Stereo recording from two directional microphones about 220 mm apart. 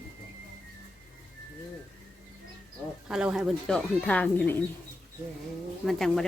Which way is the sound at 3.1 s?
5° right (ahead or behind).